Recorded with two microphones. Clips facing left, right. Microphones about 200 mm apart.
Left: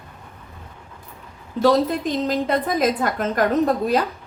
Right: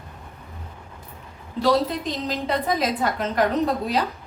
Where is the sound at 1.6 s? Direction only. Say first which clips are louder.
Left 3 dB; 50° left (ahead or behind).